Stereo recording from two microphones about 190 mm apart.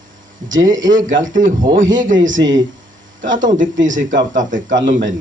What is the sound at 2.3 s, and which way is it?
Speech, 80° right.